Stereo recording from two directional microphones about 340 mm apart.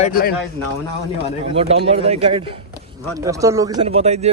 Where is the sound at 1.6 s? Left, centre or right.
Centre.